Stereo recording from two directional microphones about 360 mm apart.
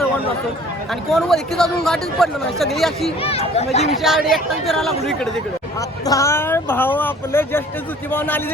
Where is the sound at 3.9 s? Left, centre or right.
Centre.